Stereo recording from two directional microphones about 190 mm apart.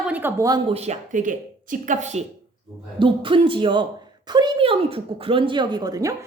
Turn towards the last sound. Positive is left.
turn(degrees=-20)  # may be behind; listen again after turning